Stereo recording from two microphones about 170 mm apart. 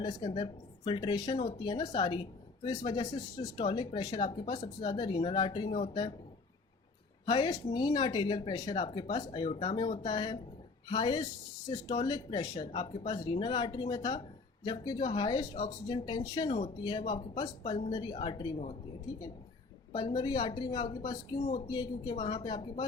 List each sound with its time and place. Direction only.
0.0 s speech: 25° left (ahead or behind)
7.3 s speech: 25° left (ahead or behind)
19.9 s a woman's voice: 25° left (ahead or behind)